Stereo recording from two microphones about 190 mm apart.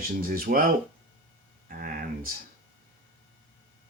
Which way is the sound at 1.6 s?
50° right (ahead or behind).